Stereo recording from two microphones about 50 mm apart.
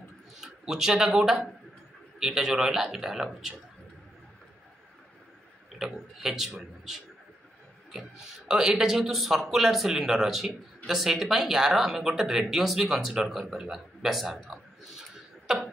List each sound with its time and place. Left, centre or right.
0.4 s a man's voice: centre
5.8 s a man's voice: centre
8.5 s speech: centre
15.5 s a sound: centre